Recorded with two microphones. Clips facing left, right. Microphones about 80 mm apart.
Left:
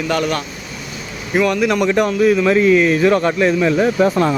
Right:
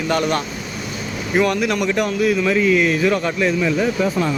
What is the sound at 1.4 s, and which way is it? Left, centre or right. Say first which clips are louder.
Speech: left 3 dB; centre.